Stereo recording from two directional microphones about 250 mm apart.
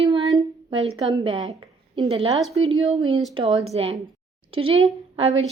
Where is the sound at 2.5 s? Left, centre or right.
Right.